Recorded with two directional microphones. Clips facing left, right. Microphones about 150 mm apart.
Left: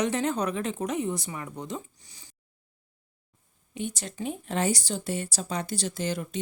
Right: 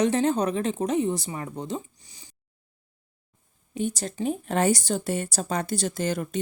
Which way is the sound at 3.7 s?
40° right (ahead or behind).